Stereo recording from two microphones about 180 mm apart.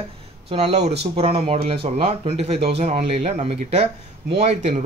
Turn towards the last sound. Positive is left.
turn(degrees=-40)  # may be behind; listen again after turning